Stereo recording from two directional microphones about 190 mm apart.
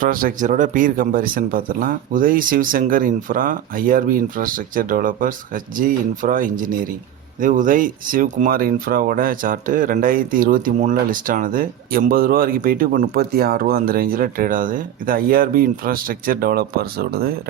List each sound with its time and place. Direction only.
0.0 s speech: 50° right (ahead or behind)